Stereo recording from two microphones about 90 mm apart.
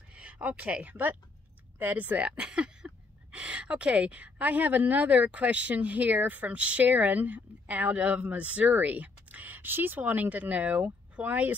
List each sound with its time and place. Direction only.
0.1 s speech: 15° right (ahead or behind)